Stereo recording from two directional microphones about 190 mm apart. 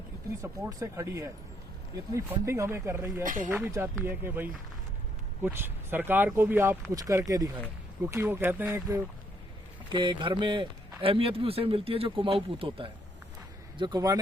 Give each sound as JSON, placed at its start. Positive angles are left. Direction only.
{"t": 0.4, "sound": "speech", "side_deg": -15}
{"t": 3.2, "sound": "speech", "side_deg": -45}
{"t": 3.5, "sound": "speech", "side_deg": -10}
{"t": 9.9, "sound": "a man's voice", "side_deg": -25}